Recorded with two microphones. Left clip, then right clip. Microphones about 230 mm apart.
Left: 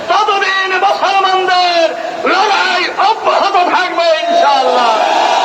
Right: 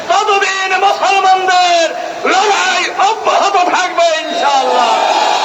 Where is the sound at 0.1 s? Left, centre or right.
Right.